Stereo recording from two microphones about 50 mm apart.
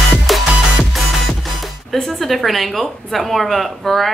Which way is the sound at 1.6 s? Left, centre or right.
Centre.